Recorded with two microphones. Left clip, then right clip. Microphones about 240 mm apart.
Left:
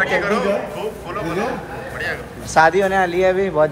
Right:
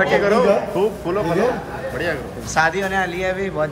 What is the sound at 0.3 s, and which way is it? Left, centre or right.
Speech, right.